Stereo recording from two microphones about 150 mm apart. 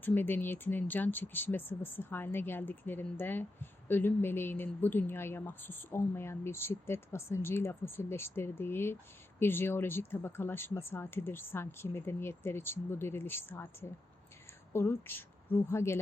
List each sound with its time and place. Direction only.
0.0 s speech: 15° left (ahead or behind)
14.7 s speech: 15° left (ahead or behind)